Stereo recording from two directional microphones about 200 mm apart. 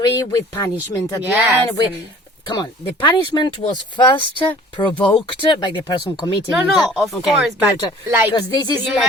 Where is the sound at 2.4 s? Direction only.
20° left (ahead or behind).